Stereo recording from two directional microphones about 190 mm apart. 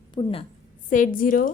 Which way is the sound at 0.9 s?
45° left (ahead or behind).